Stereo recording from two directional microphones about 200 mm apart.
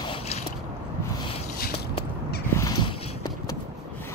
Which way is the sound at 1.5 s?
50° left (ahead or behind).